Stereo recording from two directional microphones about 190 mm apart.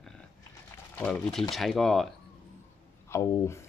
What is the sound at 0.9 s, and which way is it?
Speech, 5° left (ahead or behind).